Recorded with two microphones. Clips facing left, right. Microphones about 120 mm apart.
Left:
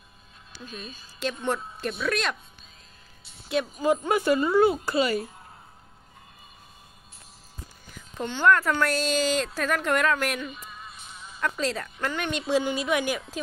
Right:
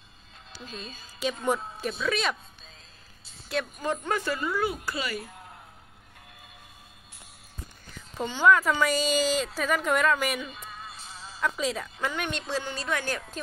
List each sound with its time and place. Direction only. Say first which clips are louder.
1.4 s a woman's voice: right 1 dB; 5° right (ahead or behind)
3.4 s speech: left 6 dB; centre (ahead or behind); by 5.2 s 25° left (ahead or behind)
8.2 s a woman's voice: even; 5° right (ahead or behind)
10.9 s music: right 1 dB; 30° right (ahead or behind)
11.3 s a woman's voice: left 1 dB; 5° right (ahead or behind)
12.4 s a woman's voice: left 6 dB; 15° left (ahead or behind)